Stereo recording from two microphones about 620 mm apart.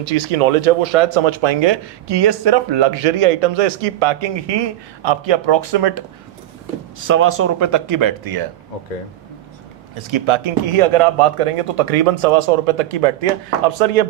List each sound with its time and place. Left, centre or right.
0.3 s speech: right
7.1 s speech: centre
10.1 s speech: right
13.7 s speech: right